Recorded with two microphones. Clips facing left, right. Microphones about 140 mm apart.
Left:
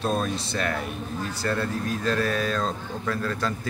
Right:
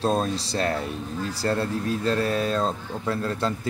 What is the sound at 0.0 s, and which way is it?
Speech, 30° right (ahead or behind).